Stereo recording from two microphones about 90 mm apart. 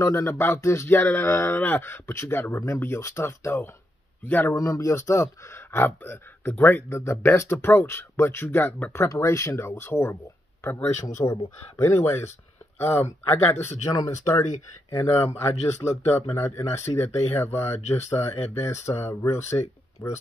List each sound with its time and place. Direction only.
0.0 s speech: 30° left (ahead or behind)
4.6 s speech: 35° left (ahead or behind)
13.9 s speech: 35° left (ahead or behind)